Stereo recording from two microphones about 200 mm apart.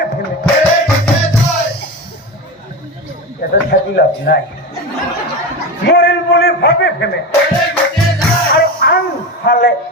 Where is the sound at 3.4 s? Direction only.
50° left (ahead or behind).